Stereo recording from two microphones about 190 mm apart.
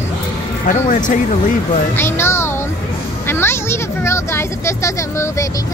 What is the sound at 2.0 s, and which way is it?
Speech, 10° left (ahead or behind).